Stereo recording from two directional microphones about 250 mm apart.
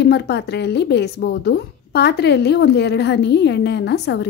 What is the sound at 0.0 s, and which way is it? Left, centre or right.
A woman's voice, left.